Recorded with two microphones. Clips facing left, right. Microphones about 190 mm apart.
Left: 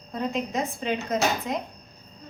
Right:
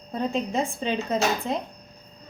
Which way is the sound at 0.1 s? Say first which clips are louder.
Right 2 dB; 30° right (ahead or behind).